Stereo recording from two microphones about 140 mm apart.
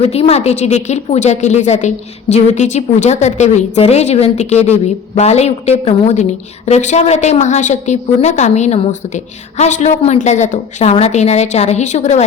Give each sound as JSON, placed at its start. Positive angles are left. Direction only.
{"t": 0.0, "sound": "a woman's voice", "side_deg": 45}